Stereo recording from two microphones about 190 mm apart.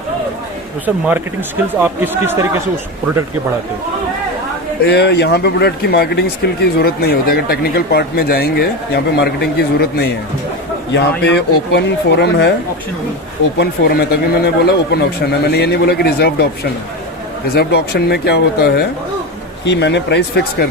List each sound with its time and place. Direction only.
1.8 s speech: 10° right (ahead or behind)
4.9 s speech: 60° left (ahead or behind)
13.6 s speech: 55° left (ahead or behind)
17.5 s speech: 60° left (ahead or behind)
19.6 s speech: 65° left (ahead or behind)